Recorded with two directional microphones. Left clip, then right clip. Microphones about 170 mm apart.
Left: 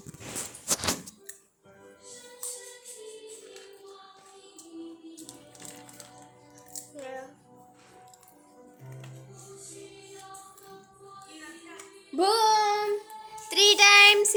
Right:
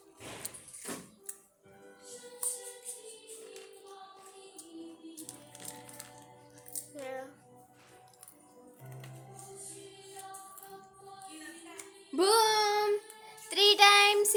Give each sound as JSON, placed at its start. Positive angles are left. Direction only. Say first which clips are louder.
{"t": 7.0, "sound": "music", "louder": "left 1 dB", "side_deg": -50}
{"t": 12.1, "sound": "child singing", "louder": "left 4 dB", "side_deg": -20}
{"t": 13.5, "sound": "child singing", "louder": "left 4 dB", "side_deg": 0}